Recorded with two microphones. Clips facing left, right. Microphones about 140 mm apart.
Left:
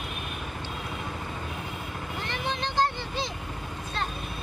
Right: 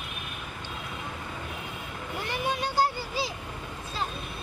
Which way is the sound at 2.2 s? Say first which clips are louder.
Right 2 dB; 10° right (ahead or behind).